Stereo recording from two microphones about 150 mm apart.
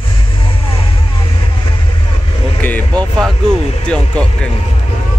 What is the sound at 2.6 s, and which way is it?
Vehicle, 10° left (ahead or behind).